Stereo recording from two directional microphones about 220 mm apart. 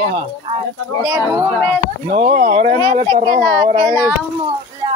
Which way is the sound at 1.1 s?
10° right (ahead or behind).